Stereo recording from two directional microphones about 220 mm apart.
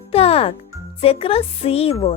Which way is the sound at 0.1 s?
25° left (ahead or behind).